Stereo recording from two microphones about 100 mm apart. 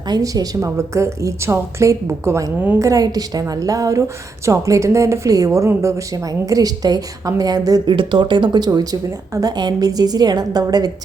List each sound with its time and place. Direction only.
0.1 s speech: 35° right (ahead or behind)
7.9 s speech: 55° right (ahead or behind)